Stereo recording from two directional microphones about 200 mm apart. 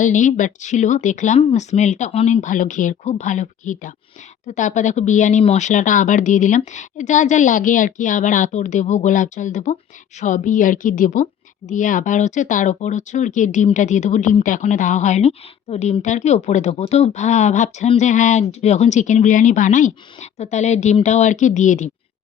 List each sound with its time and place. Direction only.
0.0 s speech: 40° left (ahead or behind)